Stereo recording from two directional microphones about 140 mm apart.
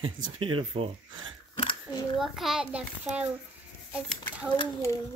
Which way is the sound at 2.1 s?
Centre (ahead or behind).